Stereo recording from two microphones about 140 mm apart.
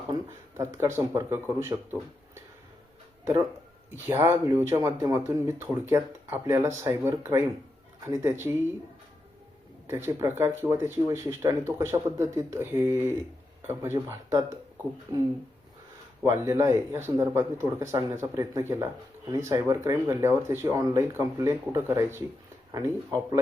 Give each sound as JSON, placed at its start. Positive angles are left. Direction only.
{"t": 0.1, "sound": "speech", "side_deg": -20}
{"t": 3.9, "sound": "speech", "side_deg": -20}
{"t": 9.8, "sound": "speech", "side_deg": -15}
{"t": 16.2, "sound": "speech", "side_deg": -20}